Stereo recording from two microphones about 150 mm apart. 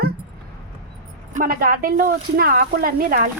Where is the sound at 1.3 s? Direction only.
65° right (ahead or behind).